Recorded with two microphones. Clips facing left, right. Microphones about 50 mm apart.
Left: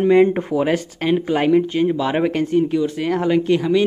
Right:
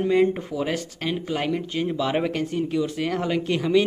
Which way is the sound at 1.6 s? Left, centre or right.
Centre.